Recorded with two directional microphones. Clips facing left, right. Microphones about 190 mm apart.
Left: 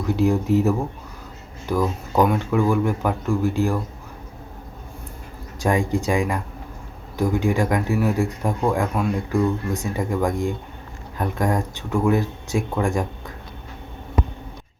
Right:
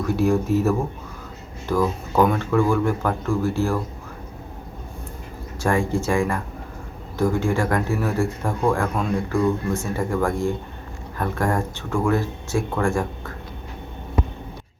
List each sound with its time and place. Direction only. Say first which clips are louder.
0.0 s speech: even; 15° left (ahead or behind)
5.5 s speech: even; 15° left (ahead or behind)